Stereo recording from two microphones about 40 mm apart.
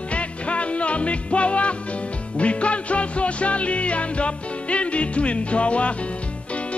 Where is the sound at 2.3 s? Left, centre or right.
Left.